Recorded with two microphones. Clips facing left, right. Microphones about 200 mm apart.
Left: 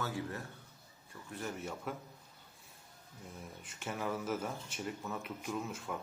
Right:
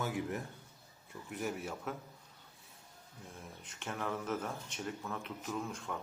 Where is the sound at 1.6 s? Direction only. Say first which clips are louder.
Even; 5° right (ahead or behind).